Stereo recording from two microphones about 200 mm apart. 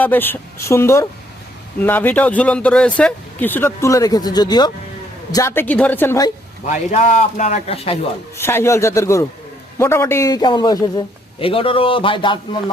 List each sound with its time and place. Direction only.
0.0 s speech: 10° left (ahead or behind)
6.9 s speech: 40° left (ahead or behind)
8.4 s a man's voice: 15° left (ahead or behind)